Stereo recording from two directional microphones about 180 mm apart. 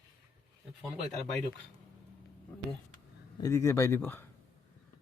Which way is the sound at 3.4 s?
15° left (ahead or behind).